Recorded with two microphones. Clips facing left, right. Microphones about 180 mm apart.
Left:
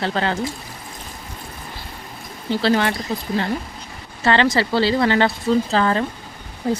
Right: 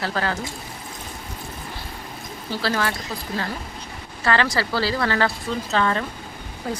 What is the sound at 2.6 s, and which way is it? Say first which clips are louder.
Speech: left 6 dB; 25° left (ahead or behind).